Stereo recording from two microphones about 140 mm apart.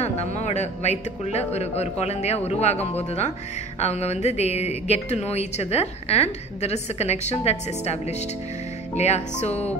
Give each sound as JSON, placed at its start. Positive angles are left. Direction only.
{"t": 0.0, "sound": "speech", "side_deg": 55}